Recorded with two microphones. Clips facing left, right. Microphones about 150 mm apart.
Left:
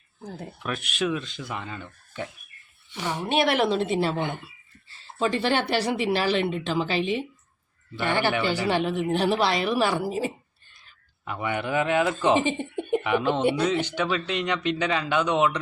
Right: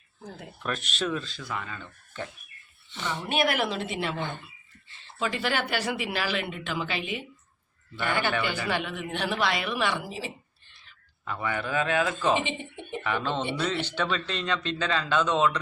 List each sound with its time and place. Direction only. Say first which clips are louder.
0.6 s speech: left 2 dB; 10° left (ahead or behind)
1.2 s speech: left 1 dB; 20° left (ahead or behind)
3.2 s speech: left 4 dB; 30° left (ahead or behind)
11.3 s speech: left 3 dB; 20° left (ahead or behind)
12.3 s a sound: left 5 dB; 40° left (ahead or behind)
13.0 s speech: left 4 dB; 15° left (ahead or behind)